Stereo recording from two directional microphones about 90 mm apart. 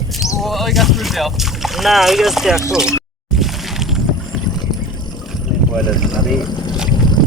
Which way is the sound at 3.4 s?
5° right (ahead or behind).